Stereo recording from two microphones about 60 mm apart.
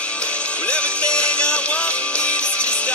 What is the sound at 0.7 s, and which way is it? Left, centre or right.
Music, centre.